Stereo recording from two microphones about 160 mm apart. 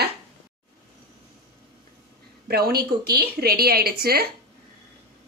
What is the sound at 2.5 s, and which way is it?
A woman's voice, 75° right (ahead or behind).